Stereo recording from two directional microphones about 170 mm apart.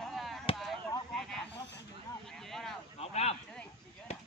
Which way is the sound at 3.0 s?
35° left (ahead or behind).